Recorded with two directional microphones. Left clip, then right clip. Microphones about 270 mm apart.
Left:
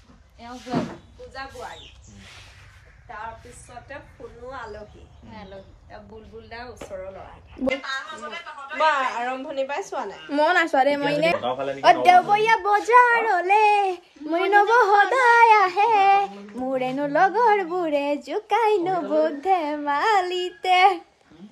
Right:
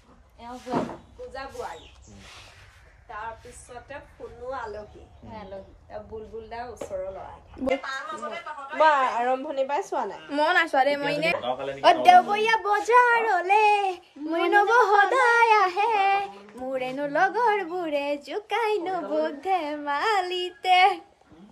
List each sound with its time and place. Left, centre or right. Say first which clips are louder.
4.5 s speech: right 2 dB; right
5.3 s a woman's voice: right 2 dB; right
10.2 s a child's voice: left 3 dB; centre
11.4 s a woman's voice: left 3 dB; centre
11.8 s a child's voice: left 1 dB; centre